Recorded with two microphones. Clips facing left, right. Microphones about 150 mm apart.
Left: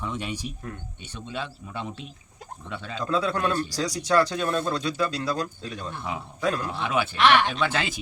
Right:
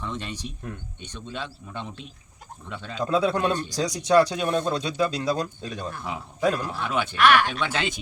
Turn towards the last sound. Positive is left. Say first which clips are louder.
# left 1 dB
turn(degrees=0)  # may be behind; listen again after turning